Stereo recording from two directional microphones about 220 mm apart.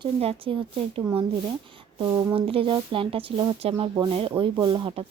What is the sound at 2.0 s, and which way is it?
Speech, 20° right (ahead or behind).